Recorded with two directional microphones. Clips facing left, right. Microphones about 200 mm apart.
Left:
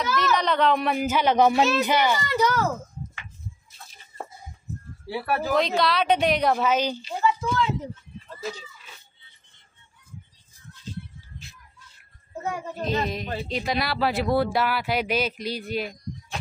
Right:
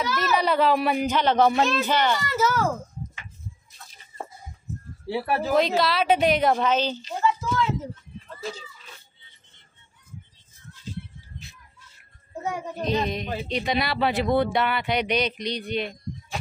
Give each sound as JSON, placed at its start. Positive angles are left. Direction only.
{"t": 0.1, "sound": "a child's voice", "side_deg": -5}
{"t": 2.1, "sound": "speech", "side_deg": 0}
{"t": 5.0, "sound": "speech", "side_deg": -25}
{"t": 5.5, "sound": "speech", "side_deg": 0}
{"t": 12.4, "sound": "a child's voice", "side_deg": -15}
{"t": 12.8, "sound": "speech", "side_deg": 0}